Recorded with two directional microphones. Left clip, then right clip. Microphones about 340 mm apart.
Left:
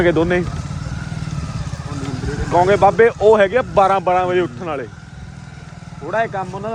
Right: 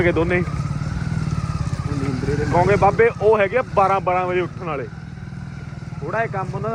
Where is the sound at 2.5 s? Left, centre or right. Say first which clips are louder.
Left 4 dB; left.